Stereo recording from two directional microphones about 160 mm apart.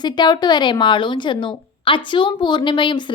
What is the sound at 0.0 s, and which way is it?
A woman's voice, 25° left (ahead or behind).